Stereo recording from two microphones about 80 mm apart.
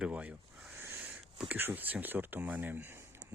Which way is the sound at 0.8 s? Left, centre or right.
Right.